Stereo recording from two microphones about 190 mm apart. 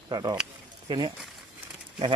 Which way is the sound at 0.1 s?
20° right (ahead or behind).